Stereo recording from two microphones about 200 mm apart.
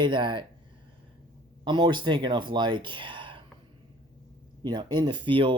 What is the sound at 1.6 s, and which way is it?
Speech, 20° right (ahead or behind).